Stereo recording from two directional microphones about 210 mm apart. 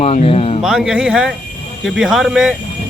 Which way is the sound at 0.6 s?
5° right (ahead or behind).